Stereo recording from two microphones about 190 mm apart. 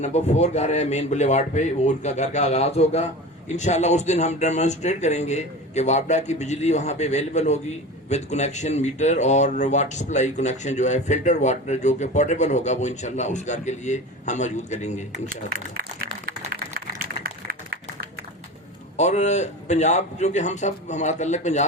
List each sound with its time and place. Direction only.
0.0 s speech: 35° left (ahead or behind)
18.9 s speech: 35° left (ahead or behind)